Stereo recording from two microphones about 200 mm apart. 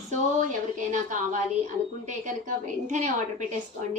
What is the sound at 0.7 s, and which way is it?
A woman's voice, 40° right (ahead or behind).